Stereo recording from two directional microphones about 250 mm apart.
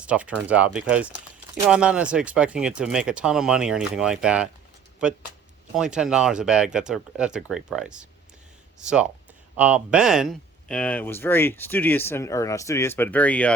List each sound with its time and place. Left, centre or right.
0.0 s speech: centre
9.6 s speech: centre